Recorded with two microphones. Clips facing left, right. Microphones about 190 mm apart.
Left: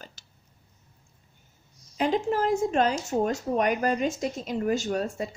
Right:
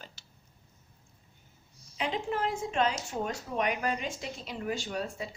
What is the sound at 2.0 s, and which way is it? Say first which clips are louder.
Speech: left 7 dB; 40° left (ahead or behind).